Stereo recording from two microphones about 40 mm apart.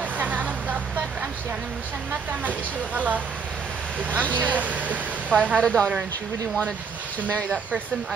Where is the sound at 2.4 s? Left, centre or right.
Right.